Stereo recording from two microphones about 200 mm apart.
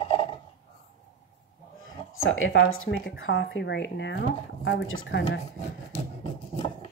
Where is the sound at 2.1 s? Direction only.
85° left.